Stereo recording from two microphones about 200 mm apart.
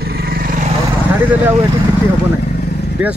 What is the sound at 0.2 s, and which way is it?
Vehicle, 50° right (ahead or behind).